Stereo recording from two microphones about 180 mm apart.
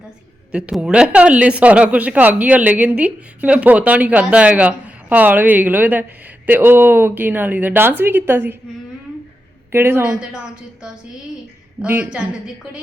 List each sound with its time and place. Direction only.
0.5 s a woman's voice: 5° right (ahead or behind)
9.7 s a woman's voice: 15° right (ahead or behind)
11.8 s a woman's voice: 5° right (ahead or behind)